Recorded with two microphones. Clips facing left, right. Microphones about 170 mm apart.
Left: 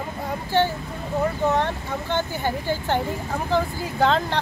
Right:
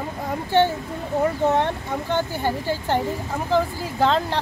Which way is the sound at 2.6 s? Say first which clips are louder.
Right 1 dB; 5° right (ahead or behind).